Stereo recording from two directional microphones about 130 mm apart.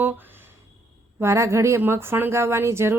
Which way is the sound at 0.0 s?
15° right (ahead or behind).